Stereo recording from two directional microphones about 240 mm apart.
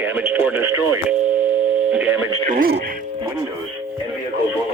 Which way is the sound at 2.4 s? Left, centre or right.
Right.